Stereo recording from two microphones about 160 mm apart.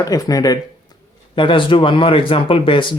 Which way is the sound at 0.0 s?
25° left (ahead or behind).